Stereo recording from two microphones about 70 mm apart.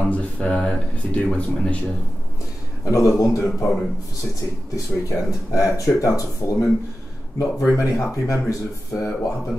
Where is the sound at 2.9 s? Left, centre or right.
Left.